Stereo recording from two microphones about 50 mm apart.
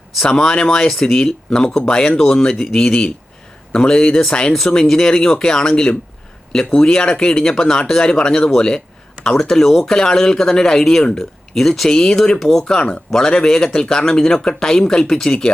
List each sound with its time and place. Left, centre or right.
0.2 s speech: centre